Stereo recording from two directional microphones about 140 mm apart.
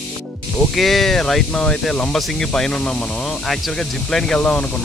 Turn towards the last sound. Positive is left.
turn(degrees=10)  # may be behind; listen again after turning